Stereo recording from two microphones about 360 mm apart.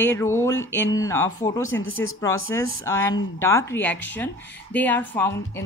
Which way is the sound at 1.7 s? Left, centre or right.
Left.